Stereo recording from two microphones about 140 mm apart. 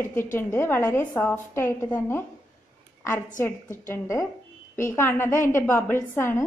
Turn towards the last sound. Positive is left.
turn(degrees=15)  # may be behind; listen again after turning